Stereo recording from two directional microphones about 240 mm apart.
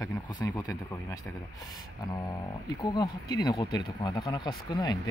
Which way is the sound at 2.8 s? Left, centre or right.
Centre.